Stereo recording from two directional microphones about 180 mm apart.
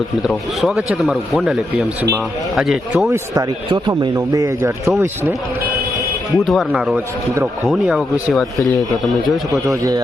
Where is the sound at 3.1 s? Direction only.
20° right (ahead or behind).